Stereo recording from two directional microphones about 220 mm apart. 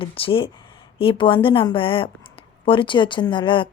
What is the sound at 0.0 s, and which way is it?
Speech, 25° left (ahead or behind).